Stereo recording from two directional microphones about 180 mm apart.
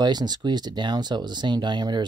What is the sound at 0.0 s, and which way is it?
Speech, 25° right (ahead or behind).